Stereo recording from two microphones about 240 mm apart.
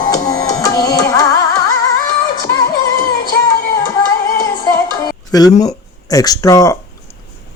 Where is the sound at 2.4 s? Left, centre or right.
Centre.